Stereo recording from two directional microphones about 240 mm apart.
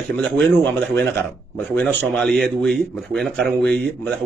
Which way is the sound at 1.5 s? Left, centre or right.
Centre.